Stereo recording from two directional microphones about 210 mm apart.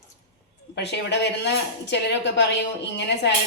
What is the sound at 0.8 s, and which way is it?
A woman's voice, 55° left (ahead or behind).